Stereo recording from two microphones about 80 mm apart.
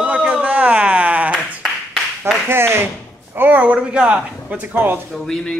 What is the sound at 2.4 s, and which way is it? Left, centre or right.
A woman's voice, right.